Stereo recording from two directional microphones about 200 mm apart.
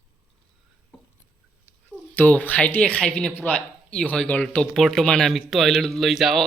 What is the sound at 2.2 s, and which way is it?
Speech, 10° left (ahead or behind).